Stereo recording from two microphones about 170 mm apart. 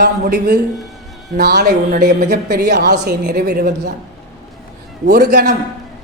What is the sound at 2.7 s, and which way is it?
A woman's voice, 70° right (ahead or behind).